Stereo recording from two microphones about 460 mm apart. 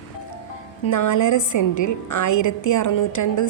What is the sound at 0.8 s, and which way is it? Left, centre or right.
A woman's voice, left.